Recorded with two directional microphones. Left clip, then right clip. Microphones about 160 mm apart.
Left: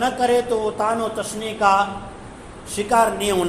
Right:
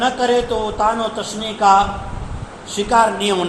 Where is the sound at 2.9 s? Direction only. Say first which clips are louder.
Right 3 dB; 45° left (ahead or behind).